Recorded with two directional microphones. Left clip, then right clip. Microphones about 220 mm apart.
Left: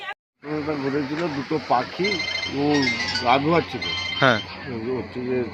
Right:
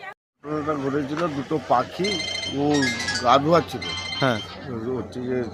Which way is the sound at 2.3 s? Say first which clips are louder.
Left 1 dB; 55° right (ahead or behind).